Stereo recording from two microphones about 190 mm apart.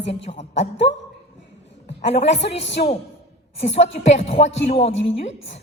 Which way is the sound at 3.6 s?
35° left (ahead or behind).